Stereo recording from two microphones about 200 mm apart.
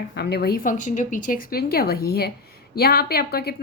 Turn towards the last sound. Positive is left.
turn(degrees=50)  # may be behind; listen again after turning